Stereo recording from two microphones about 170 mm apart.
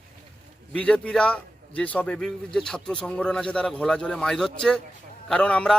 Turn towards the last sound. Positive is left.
turn(degrees=5)  # may be behind; listen again after turning